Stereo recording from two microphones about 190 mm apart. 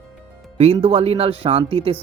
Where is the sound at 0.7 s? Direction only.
30° right (ahead or behind).